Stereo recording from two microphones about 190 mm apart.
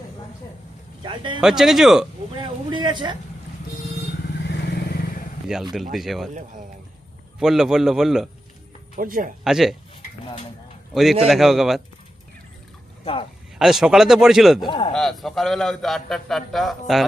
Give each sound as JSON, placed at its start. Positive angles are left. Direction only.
{"t": 1.0, "sound": "speech", "side_deg": -25}
{"t": 1.4, "sound": "a man's voice", "side_deg": 0}
{"t": 2.3, "sound": "speech", "side_deg": -25}
{"t": 4.4, "sound": "vehicle", "side_deg": 60}
{"t": 5.5, "sound": "a man's voice", "side_deg": -5}
{"t": 7.3, "sound": "a man's voice", "side_deg": 0}
{"t": 9.0, "sound": "speech", "side_deg": -45}
{"t": 9.4, "sound": "a man's voice", "side_deg": 0}
{"t": 10.9, "sound": "a man's voice", "side_deg": 0}
{"t": 13.6, "sound": "a man's voice", "side_deg": 0}
{"t": 14.7, "sound": "speech", "side_deg": 25}
{"t": 14.9, "sound": "a man's voice", "side_deg": 0}